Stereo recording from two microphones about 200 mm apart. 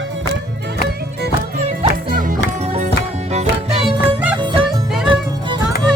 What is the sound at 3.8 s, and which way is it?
Music, 5° right (ahead or behind).